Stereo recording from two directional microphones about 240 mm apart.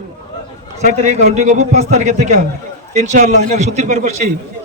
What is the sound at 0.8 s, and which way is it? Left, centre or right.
A man's voice, right.